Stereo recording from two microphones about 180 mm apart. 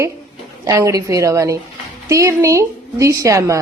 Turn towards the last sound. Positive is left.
turn(degrees=-15)  # may be behind; listen again after turning